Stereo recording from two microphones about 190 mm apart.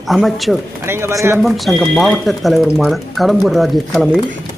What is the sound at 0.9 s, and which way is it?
Speech, 15° right (ahead or behind).